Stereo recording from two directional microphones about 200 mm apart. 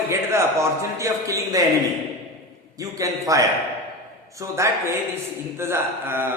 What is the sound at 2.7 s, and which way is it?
A man's voice, 15° right (ahead or behind).